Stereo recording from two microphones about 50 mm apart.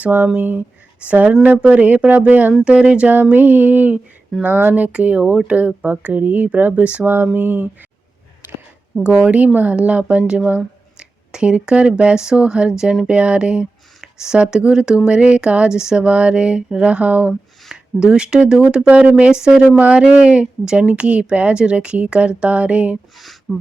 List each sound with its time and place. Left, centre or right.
0.0 s speech: right
2.6 s speech: right
3.3 s speech: right
4.3 s speech: centre
4.7 s speech: right
7.0 s speech: right
9.0 s speech: right
18.0 s speech: centre
19.7 s speech: right
23.5 s speech: centre